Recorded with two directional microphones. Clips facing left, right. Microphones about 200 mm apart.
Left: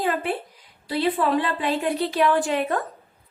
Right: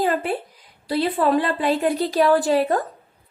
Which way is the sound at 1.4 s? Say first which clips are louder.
Right 4 dB; 40° right (ahead or behind).